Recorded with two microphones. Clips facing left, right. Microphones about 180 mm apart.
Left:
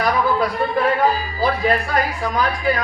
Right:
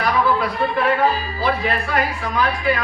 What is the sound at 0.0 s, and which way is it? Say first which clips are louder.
Speech: left 1 dB; 40° left (ahead or behind).